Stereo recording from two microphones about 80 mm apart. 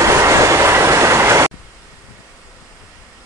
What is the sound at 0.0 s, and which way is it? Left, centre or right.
Train, right.